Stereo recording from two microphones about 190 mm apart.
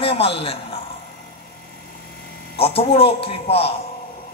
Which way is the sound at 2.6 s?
30° left (ahead or behind).